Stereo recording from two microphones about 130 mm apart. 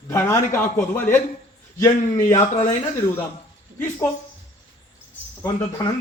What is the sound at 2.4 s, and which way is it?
Speech, 60° left (ahead or behind).